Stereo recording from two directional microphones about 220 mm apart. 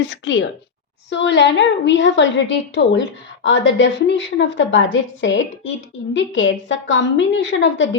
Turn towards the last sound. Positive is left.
turn(degrees=55)  # may be behind; listen again after turning